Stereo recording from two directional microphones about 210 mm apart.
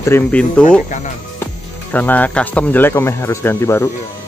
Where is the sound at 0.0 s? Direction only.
10° left (ahead or behind).